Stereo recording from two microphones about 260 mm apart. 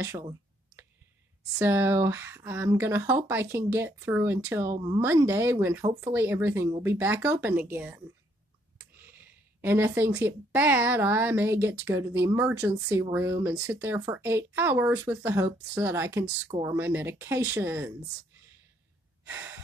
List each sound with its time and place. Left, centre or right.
0.0 s a sound: centre
1.6 s speech: centre
9.0 s speech: centre
16.4 s speech: right
16.7 s speech: centre
19.2 s breathing: centre